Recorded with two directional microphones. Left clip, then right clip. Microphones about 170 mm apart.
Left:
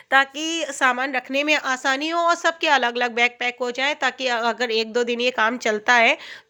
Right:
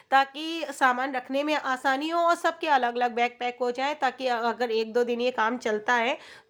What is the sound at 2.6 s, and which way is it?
Speech, 15° left (ahead or behind).